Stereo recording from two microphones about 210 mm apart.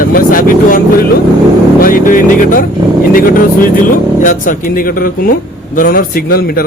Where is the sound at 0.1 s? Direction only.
40° left (ahead or behind).